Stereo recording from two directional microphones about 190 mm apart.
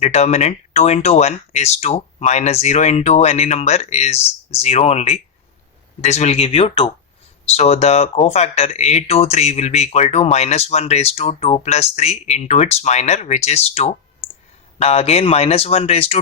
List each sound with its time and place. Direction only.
0.0 s speech: 35° left (ahead or behind)